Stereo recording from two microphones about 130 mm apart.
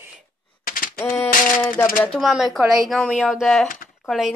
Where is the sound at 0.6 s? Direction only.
90° left.